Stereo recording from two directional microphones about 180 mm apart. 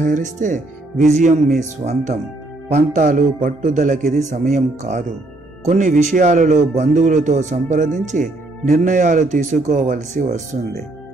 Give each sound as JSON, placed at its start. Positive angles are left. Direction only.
{"t": 0.0, "sound": "speech", "side_deg": -45}